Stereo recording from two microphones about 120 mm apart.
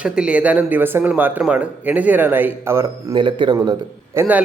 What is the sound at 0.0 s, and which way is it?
Speech, 10° right (ahead or behind).